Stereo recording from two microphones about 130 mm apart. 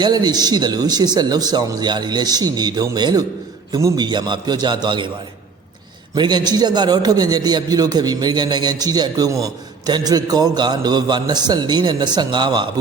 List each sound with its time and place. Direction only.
0.0 s a man's voice: 35° right (ahead or behind)
6.1 s a man's voice: 35° right (ahead or behind)